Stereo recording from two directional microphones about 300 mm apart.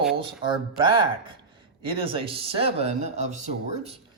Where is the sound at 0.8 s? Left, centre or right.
Centre.